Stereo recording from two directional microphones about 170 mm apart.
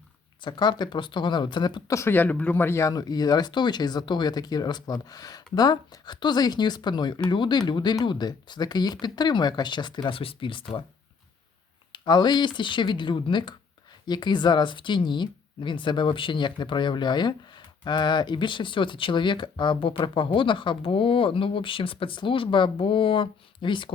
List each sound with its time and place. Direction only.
0.4 s speech: 25° left (ahead or behind)
11.9 s speech: 25° left (ahead or behind)